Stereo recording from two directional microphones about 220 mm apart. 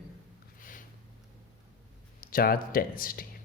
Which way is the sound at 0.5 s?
40° left (ahead or behind).